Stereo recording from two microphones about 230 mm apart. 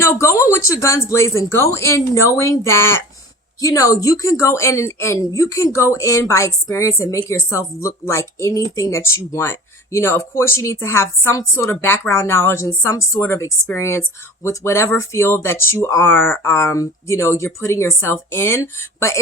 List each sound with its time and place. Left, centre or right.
0.0 s speech: centre